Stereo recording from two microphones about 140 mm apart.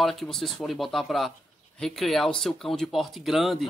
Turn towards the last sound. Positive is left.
turn(degrees=0)  # may be behind; listen again after turning